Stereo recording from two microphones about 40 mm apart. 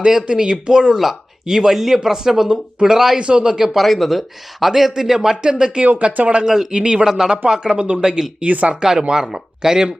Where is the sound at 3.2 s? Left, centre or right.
Right.